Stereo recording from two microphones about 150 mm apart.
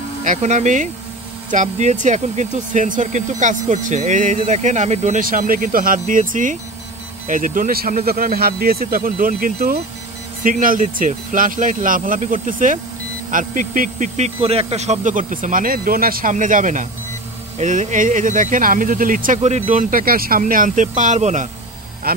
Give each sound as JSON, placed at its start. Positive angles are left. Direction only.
{"t": 0.2, "sound": "speech", "side_deg": -55}
{"t": 5.2, "sound": "speech", "side_deg": -65}
{"t": 22.1, "sound": "speech", "side_deg": -90}